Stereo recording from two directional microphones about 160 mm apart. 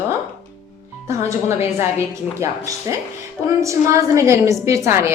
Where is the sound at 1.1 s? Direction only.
15° right (ahead or behind).